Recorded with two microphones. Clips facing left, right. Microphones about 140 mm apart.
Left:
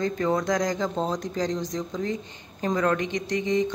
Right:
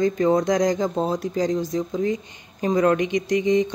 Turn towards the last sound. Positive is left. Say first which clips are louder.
# right 5 dB
turn(degrees=-15)  # may be behind; listen again after turning